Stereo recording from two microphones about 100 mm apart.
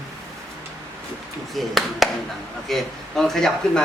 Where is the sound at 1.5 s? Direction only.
Centre (ahead or behind).